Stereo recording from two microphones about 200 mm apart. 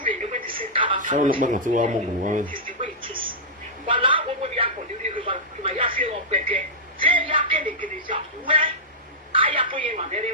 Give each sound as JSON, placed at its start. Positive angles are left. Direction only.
{"t": 0.0, "sound": "television", "side_deg": -40}
{"t": 0.9, "sound": "speech", "side_deg": -40}
{"t": 3.0, "sound": "speech", "side_deg": -25}
{"t": 7.2, "sound": "a sound", "side_deg": -25}
{"t": 7.6, "sound": "speech", "side_deg": -45}
{"t": 8.0, "sound": "speech", "side_deg": -25}
{"t": 9.3, "sound": "a sound", "side_deg": -25}
{"t": 9.7, "sound": "speech", "side_deg": -30}